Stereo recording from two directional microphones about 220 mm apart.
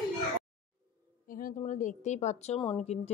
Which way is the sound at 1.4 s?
35° left (ahead or behind).